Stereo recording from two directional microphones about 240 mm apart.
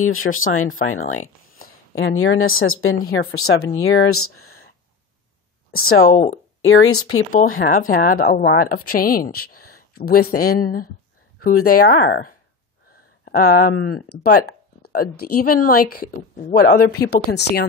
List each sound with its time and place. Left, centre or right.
0.0 s speech: left
1.2 s a sound: left
2.0 s speech: left
5.9 s a woman's voice: left
6.6 s speech: left
7.3 s a woman's voice: left
9.6 s a sound: left
10.0 s a woman's voice: left